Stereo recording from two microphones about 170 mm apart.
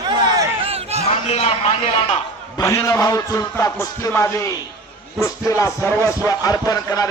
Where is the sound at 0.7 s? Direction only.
35° right (ahead or behind).